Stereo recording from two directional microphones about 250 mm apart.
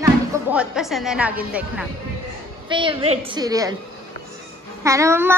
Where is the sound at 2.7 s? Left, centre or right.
Centre.